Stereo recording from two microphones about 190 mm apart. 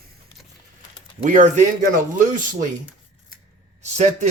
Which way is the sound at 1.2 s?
40° right (ahead or behind).